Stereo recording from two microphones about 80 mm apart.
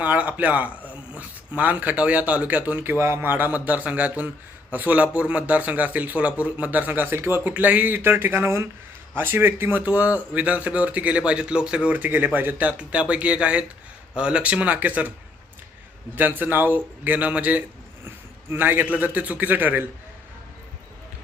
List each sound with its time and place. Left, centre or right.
0.0 s speech: right
7.5 s speech: centre
16.1 s speech: right